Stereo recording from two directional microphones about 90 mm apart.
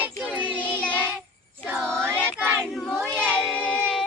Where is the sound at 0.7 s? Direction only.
15° left (ahead or behind).